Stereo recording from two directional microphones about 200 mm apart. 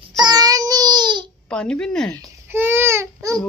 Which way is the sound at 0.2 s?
20° right (ahead or behind).